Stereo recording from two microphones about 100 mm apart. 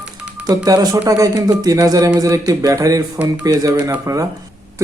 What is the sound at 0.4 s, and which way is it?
Speech, 40° right (ahead or behind).